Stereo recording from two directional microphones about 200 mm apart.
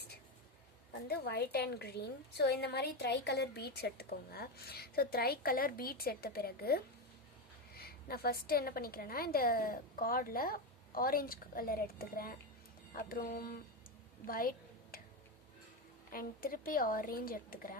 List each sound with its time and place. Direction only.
1.0 s a woman's voice: 55° left (ahead or behind)
16.1 s a woman's voice: 45° left (ahead or behind)